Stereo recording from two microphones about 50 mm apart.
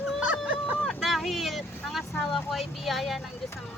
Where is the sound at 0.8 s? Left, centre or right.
Centre.